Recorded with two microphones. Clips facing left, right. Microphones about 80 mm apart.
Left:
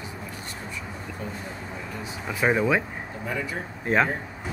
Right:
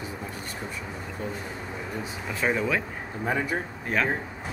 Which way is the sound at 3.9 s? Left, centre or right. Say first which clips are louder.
Left 5 dB; left.